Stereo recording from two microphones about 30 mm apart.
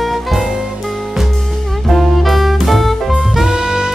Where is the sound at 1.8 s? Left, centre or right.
Centre.